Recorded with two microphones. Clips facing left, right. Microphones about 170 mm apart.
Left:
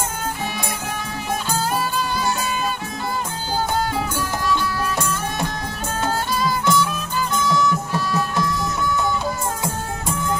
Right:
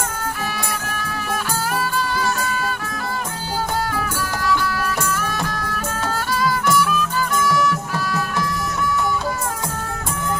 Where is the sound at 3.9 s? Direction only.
25° left (ahead or behind).